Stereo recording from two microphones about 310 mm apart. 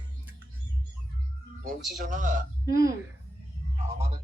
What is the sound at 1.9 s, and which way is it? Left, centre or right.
Speech, right.